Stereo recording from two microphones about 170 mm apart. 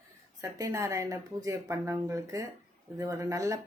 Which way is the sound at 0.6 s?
15° right (ahead or behind).